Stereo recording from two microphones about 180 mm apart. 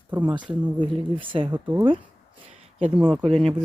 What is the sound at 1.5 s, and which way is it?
Speech, 10° right (ahead or behind).